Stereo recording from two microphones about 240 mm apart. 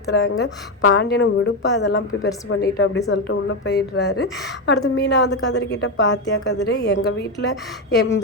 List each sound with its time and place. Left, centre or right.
0.1 s a woman's voice: left